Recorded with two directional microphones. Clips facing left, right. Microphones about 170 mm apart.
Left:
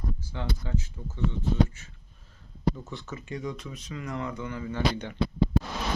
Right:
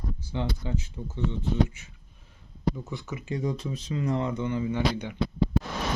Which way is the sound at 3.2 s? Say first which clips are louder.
Right 6 dB; 30° right (ahead or behind).